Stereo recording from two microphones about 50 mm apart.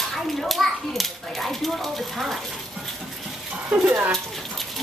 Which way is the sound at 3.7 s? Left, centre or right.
Centre.